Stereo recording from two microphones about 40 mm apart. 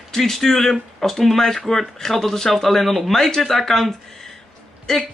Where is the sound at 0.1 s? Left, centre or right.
Centre.